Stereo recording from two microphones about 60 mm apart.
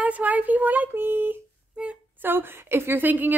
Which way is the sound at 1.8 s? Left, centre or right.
Centre.